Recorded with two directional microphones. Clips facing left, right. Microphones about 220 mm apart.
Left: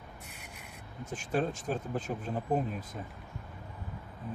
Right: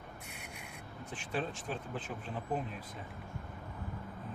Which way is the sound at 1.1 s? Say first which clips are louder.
Left 6 dB; 45° left (ahead or behind).